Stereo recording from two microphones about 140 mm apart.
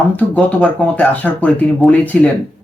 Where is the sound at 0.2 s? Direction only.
10° left (ahead or behind).